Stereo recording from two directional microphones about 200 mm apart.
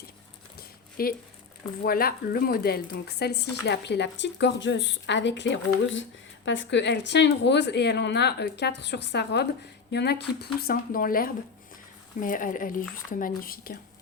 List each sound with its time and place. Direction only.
1.0 s speech: 50° left (ahead or behind)